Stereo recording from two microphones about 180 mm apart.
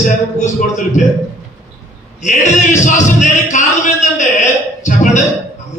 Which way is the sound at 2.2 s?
40° left (ahead or behind).